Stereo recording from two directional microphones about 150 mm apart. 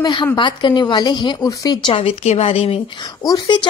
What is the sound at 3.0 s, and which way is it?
Speech, 25° left (ahead or behind).